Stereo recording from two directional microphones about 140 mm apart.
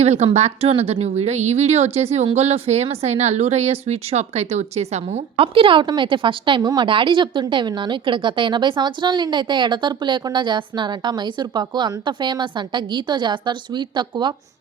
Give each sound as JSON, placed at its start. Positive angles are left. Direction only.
{"t": 0.0, "sound": "a woman's voice", "side_deg": -50}